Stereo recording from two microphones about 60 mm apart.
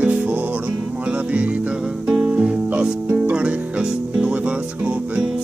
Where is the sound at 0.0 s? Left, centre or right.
Centre.